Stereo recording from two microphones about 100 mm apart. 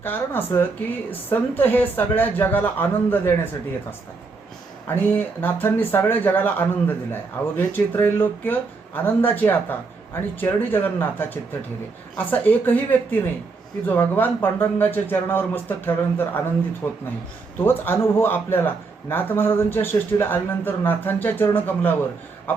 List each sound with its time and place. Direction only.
0.0 s speech: 20° left (ahead or behind)
4.9 s speech: 20° left (ahead or behind)